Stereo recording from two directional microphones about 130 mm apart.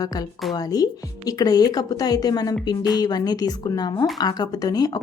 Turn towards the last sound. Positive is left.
turn(degrees=30)  # may be behind; listen again after turning